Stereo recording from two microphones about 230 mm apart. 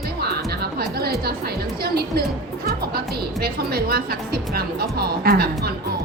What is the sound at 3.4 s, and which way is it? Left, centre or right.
Speech, right.